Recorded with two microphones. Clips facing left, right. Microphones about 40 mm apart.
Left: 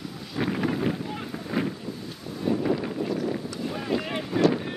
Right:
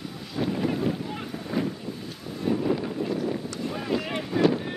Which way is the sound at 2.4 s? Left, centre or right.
Centre.